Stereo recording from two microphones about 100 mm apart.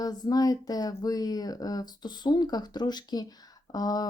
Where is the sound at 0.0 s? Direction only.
40° left (ahead or behind).